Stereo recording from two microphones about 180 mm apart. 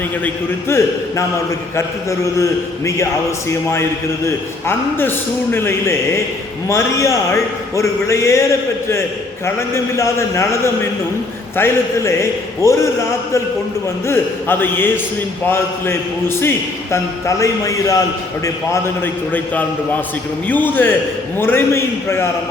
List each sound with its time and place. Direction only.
0.7 s a man's voice: 15° left (ahead or behind)
9.6 s a man's voice: 15° left (ahead or behind)